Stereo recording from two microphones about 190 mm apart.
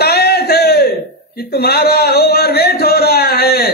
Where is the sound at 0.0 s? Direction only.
55° left (ahead or behind).